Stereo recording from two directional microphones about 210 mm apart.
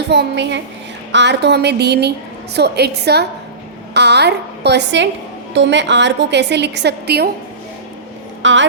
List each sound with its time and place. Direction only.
0.1 s a woman's voice: 55° right (ahead or behind)
8.4 s speech: 60° right (ahead or behind)